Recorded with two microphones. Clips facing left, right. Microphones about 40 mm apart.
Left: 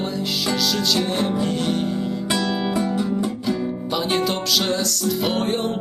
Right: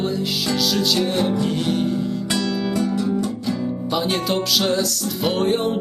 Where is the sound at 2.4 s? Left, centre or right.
Left.